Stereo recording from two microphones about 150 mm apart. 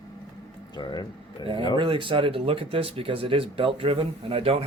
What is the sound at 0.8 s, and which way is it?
Speech, 30° left (ahead or behind).